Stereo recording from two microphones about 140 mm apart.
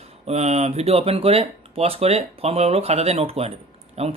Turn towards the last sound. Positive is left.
turn(degrees=-50)  # may be behind; listen again after turning